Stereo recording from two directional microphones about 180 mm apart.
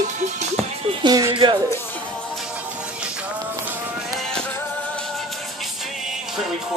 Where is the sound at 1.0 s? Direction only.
25° right (ahead or behind).